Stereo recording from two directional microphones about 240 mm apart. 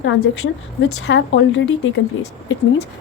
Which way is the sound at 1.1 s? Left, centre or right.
Left.